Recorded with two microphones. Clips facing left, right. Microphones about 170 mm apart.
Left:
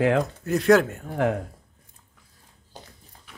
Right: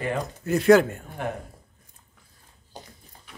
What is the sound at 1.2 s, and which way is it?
Speech, 90° left.